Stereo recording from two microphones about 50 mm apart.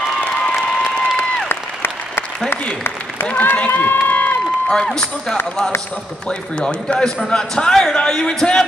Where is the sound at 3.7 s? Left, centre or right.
Left.